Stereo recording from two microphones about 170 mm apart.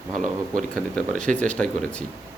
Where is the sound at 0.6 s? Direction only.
5° left (ahead or behind).